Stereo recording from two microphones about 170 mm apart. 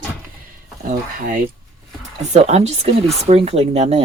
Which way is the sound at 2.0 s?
40° right (ahead or behind).